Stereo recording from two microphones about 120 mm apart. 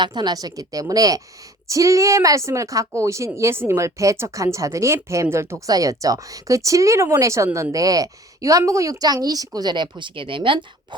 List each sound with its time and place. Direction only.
0.0 s a woman's voice: 35° right (ahead or behind)